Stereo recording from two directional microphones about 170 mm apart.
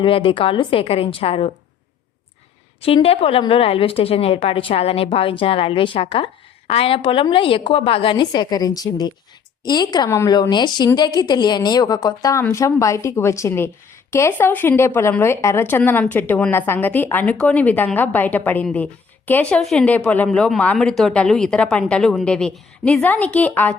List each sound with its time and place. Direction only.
0.0 s a woman's voice: 30° left (ahead or behind)
2.8 s a woman's voice: 35° left (ahead or behind); by 23.7 s 10° left (ahead or behind)